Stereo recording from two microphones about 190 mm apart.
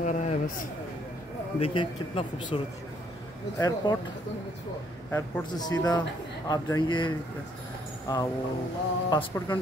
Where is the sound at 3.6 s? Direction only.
20° left (ahead or behind).